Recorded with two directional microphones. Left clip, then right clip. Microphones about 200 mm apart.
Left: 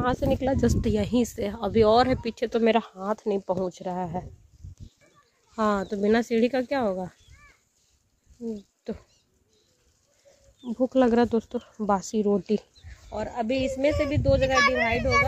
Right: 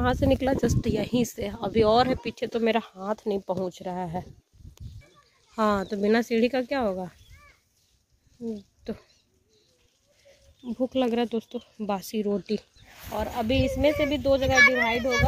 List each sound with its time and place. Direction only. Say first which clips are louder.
0.0 s speech: right 1 dB; 10° right (ahead or behind)
0.6 s speech: left 1 dB; 15° left (ahead or behind)
5.5 s speech: right 1 dB; centre (ahead or behind)
8.5 s speech: left 1 dB; 5° left (ahead or behind)
10.7 s speech: left 4 dB; 15° left (ahead or behind)
13.1 s a child's voice: right 1 dB; 20° right (ahead or behind)